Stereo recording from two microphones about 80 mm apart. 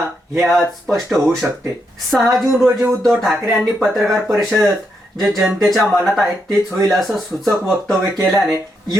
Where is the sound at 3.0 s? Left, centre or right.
Centre.